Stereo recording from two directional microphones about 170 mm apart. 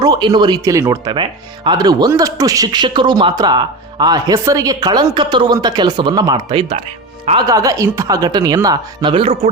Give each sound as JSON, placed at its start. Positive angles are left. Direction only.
{"t": 0.0, "sound": "speech", "side_deg": -25}
{"t": 7.3, "sound": "speech", "side_deg": -20}